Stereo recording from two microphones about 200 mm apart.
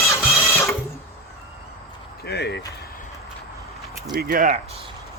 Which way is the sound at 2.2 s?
55° left (ahead or behind).